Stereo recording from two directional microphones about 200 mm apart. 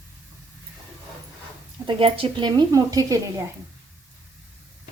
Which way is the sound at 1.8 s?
25° right (ahead or behind).